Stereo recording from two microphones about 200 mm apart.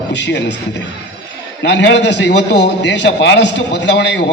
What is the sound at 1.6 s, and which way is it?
A man's voice, 60° left (ahead or behind).